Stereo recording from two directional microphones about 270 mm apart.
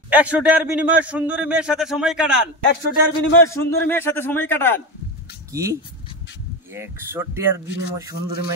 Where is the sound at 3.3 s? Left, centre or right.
Centre.